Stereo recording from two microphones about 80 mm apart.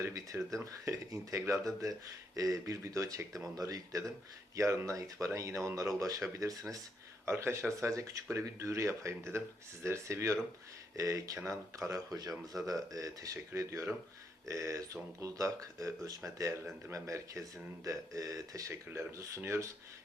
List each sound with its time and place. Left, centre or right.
0.6 s speech: right
4.5 s speech: right
7.3 s speech: right